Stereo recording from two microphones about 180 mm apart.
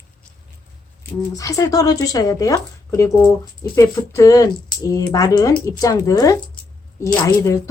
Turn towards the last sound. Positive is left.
turn(degrees=20)  # may be behind; listen again after turning